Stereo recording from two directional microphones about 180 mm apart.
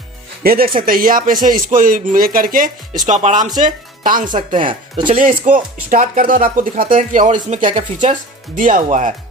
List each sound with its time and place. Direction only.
0.4 s speech: 55° right (ahead or behind)